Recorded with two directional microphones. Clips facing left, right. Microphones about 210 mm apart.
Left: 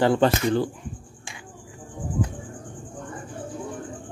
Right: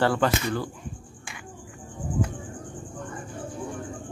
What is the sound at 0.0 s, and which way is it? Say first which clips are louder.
Speech: left 4 dB; 20° left (ahead or behind).